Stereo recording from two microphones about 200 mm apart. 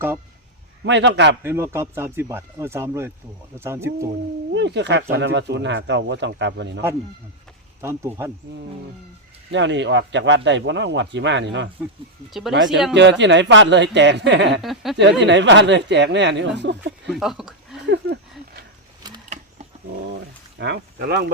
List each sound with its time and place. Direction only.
0.9 s speech: 60° right (ahead or behind)
1.5 s speech: 10° right (ahead or behind)
4.5 s speech: 60° right (ahead or behind)
7.8 s speech: 15° right (ahead or behind)
9.5 s speech: 65° right (ahead or behind)
12.3 s speech: centre (ahead or behind)
12.9 s speech: 60° right (ahead or behind)
14.6 s speech: centre (ahead or behind)
15.2 s speech: 60° right (ahead or behind)
17.1 s speech: centre (ahead or behind)
17.8 s speech: 60° right (ahead or behind)
20.6 s speech: 55° right (ahead or behind)